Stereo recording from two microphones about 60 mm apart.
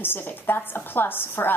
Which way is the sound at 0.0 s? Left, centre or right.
Left.